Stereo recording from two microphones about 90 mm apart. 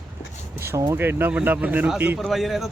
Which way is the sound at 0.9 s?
20° right (ahead or behind).